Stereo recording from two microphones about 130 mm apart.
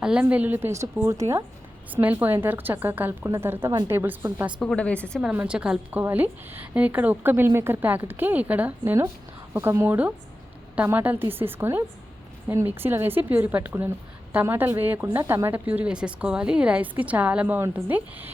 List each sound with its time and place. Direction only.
0.0 s a woman's voice: 5° right (ahead or behind); by 1.5 s 25° right (ahead or behind)
1.9 s a woman's voice: 15° right (ahead or behind)
4.6 s a woman's voice: 5° left (ahead or behind)
5.2 s a woman's voice: 10° right (ahead or behind)